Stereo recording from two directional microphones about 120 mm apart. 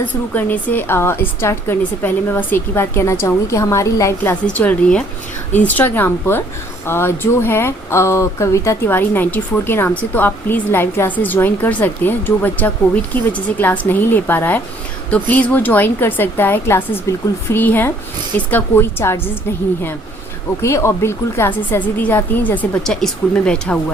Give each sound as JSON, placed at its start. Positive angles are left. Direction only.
{"t": 0.3, "sound": "a woman's voice", "side_deg": 15}
{"t": 20.6, "sound": "speech", "side_deg": 25}